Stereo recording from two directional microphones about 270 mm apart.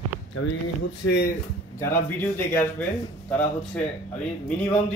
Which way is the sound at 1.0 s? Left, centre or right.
Left.